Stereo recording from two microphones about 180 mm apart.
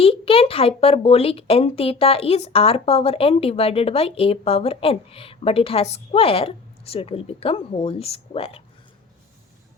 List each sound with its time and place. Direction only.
0.0 s speech: 30° left (ahead or behind)